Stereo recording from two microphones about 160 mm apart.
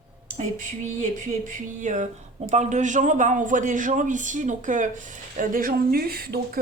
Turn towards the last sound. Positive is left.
turn(degrees=-75)  # may be behind; listen again after turning